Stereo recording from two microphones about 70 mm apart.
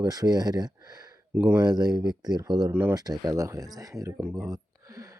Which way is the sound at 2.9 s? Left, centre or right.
Right.